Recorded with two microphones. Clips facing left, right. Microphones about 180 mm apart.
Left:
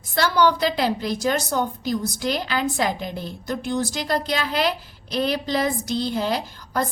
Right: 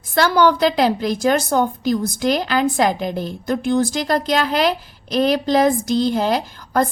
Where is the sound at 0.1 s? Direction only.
50° right (ahead or behind).